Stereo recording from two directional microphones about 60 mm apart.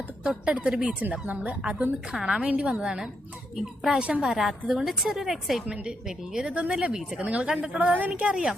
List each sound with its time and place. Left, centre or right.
0.3 s a woman's voice: centre
5.6 s speech: centre
6.1 s a woman's voice: centre
6.5 s a woman's voice: centre